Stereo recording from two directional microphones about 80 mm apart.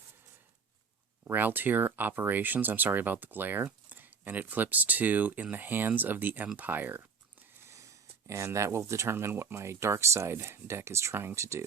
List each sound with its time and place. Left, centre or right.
1.3 s speech: right
7.6 s speech: right